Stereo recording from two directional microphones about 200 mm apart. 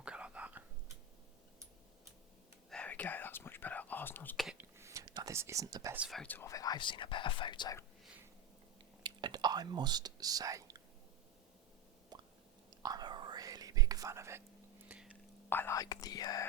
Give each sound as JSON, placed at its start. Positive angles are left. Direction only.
{"t": 0.0, "sound": "whispering", "side_deg": -5}
{"t": 2.6, "sound": "whispering", "side_deg": 5}
{"t": 4.4, "sound": "whispering", "side_deg": -10}
{"t": 6.0, "sound": "speech", "side_deg": 0}
{"t": 9.0, "sound": "whispering", "side_deg": -20}
{"t": 12.1, "sound": "a sound", "side_deg": -20}
{"t": 12.8, "sound": "whispering", "side_deg": -20}
{"t": 15.4, "sound": "speech", "side_deg": 10}